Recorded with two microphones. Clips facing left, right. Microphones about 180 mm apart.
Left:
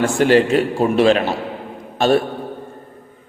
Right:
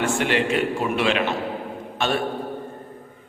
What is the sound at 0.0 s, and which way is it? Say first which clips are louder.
A man's voice: left 8 dB; 40° left (ahead or behind).